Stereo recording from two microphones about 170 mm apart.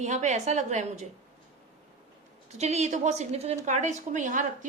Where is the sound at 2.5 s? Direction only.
40° right (ahead or behind).